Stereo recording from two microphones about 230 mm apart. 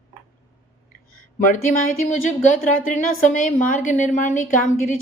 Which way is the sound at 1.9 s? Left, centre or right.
Left.